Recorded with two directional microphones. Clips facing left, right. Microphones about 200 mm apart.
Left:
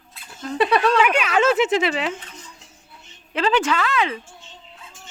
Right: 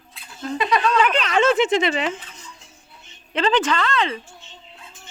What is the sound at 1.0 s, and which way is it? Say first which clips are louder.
Speech: even; 10° left (ahead or behind).